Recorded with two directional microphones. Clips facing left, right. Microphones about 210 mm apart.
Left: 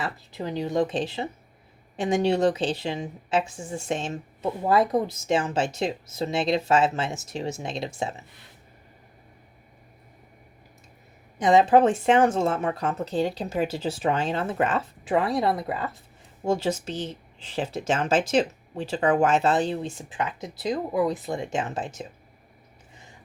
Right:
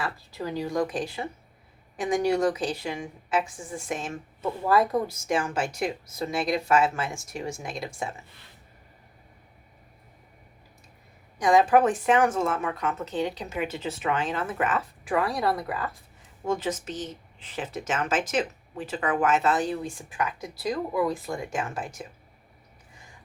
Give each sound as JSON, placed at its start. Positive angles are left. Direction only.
{"t": 0.0, "sound": "speech", "side_deg": 20}
{"t": 11.3, "sound": "speech", "side_deg": 25}